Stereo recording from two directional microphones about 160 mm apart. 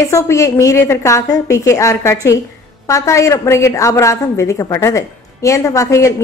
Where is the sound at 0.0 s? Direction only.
20° left (ahead or behind).